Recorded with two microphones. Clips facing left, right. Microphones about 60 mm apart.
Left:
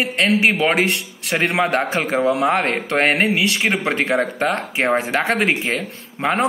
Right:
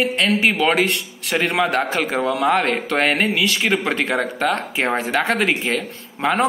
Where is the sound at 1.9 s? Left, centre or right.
Centre.